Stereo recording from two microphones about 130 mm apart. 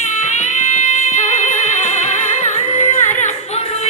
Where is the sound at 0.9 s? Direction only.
75° left (ahead or behind).